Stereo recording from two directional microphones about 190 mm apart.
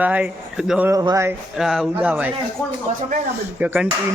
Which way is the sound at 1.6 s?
Centre (ahead or behind).